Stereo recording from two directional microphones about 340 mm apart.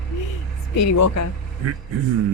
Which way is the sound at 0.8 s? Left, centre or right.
Left.